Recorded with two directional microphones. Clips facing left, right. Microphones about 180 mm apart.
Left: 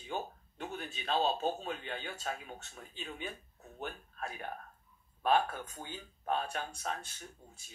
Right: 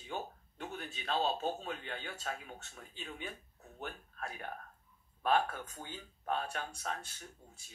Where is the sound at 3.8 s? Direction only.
20° left (ahead or behind).